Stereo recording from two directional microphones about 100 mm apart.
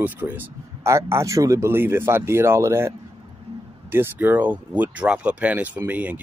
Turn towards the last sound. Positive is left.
turn(degrees=-15)  # may be behind; listen again after turning